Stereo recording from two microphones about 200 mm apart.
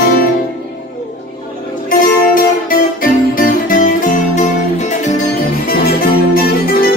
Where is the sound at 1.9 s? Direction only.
45° left (ahead or behind).